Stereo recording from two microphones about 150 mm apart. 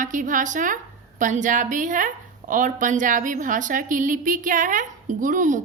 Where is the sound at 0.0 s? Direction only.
60° right (ahead or behind).